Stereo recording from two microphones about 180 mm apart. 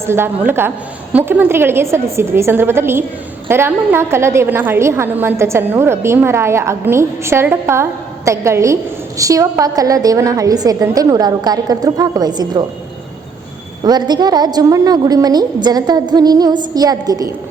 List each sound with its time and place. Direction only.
0.0 s a woman's voice: 15° right (ahead or behind)
13.8 s a woman's voice: 25° right (ahead or behind)